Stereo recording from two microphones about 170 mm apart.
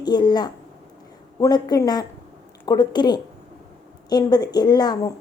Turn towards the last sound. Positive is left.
turn(degrees=25)  # may be behind; listen again after turning